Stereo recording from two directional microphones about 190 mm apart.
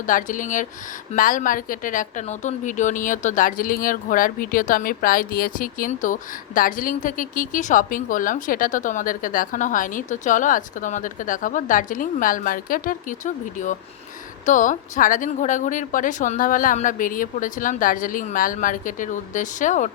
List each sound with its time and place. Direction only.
0.0 s a woman's voice: 45° left (ahead or behind)